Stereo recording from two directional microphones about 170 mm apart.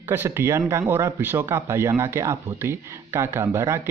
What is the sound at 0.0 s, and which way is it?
Speech, 15° right (ahead or behind).